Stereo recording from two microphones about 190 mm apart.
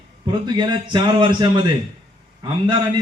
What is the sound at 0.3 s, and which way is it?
Speech, 25° right (ahead or behind).